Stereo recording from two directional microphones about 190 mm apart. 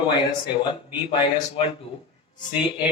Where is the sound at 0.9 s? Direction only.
25° left (ahead or behind).